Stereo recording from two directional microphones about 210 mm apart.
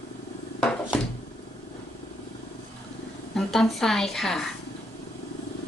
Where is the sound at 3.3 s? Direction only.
Centre (ahead or behind).